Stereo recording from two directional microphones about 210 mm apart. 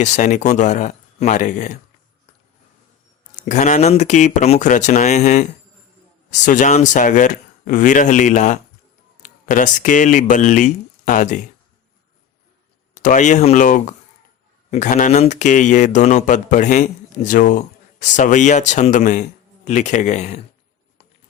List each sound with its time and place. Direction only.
0.0 s a man's voice: 35° left (ahead or behind)
3.3 s a man's voice: 35° left (ahead or behind)
12.9 s a man's voice: 35° left (ahead or behind)